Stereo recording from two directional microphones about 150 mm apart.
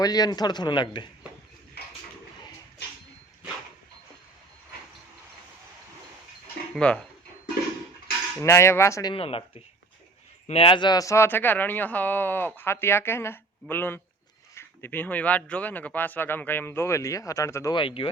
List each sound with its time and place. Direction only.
0.0 s speech: 25° left (ahead or behind)
6.7 s speech: 5° left (ahead or behind)
8.4 s speech: 20° left (ahead or behind)
9.1 s speech: 40° left (ahead or behind)
10.4 s speech: 40° left (ahead or behind); by 17.7 s 20° left (ahead or behind)
17.7 s speech: 35° left (ahead or behind)